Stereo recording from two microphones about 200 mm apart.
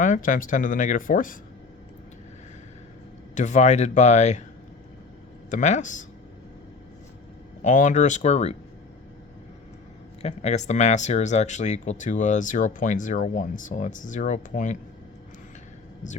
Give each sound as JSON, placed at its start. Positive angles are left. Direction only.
{"t": 0.0, "sound": "speech", "side_deg": 40}
{"t": 3.3, "sound": "speech", "side_deg": 35}
{"t": 5.5, "sound": "speech", "side_deg": 40}
{"t": 7.6, "sound": "speech", "side_deg": 40}
{"t": 10.2, "sound": "speech", "side_deg": 35}